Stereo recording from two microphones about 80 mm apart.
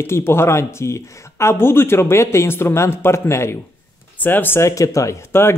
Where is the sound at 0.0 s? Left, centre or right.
Left.